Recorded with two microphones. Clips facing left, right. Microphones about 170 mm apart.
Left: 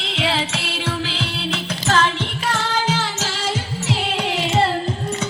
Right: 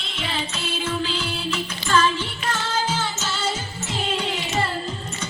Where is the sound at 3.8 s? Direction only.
85° left.